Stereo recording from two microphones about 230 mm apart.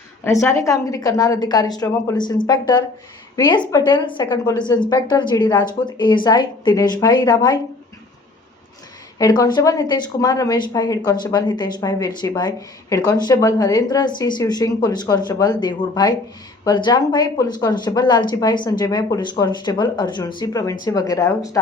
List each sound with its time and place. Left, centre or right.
0.3 s a woman's voice: centre
9.1 s a woman's voice: centre